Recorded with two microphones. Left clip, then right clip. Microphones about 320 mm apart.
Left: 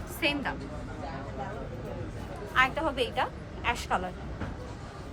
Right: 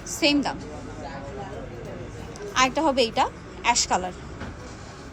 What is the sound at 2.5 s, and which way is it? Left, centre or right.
A woman's voice, centre.